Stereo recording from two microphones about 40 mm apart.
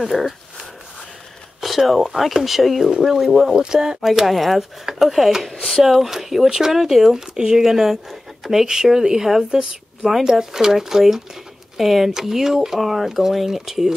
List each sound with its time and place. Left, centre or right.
0.0 s speech: centre
2.8 s speech: centre
3.1 s speech: centre
4.0 s speech: centre
5.9 s speech: centre